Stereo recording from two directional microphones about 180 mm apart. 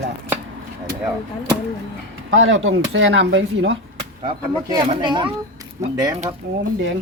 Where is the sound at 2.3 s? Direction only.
90° right.